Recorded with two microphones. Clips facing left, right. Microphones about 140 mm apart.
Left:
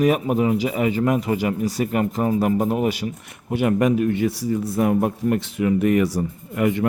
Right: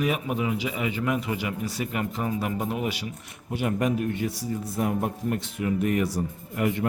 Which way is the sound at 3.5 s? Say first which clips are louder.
Left 7 dB; 70° left (ahead or behind).